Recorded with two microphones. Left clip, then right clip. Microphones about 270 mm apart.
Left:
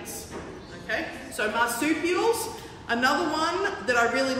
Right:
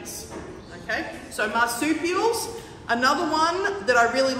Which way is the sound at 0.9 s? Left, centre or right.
Centre.